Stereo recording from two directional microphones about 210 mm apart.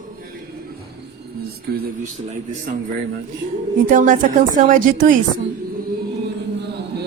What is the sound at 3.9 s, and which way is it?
Speech, 40° right (ahead or behind).